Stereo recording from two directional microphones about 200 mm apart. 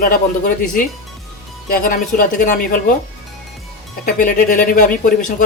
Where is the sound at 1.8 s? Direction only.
45° left (ahead or behind).